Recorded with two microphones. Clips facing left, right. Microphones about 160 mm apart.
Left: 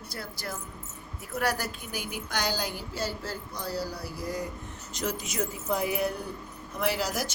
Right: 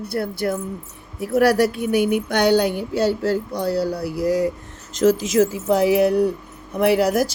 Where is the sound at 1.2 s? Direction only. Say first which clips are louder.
Right 14 dB; 70° right (ahead or behind).